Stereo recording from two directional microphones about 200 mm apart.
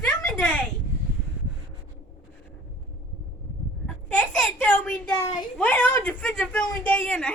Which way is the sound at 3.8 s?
5° left (ahead or behind).